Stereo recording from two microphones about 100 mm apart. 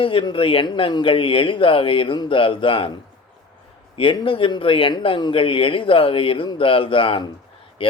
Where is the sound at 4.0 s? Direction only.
60° left (ahead or behind).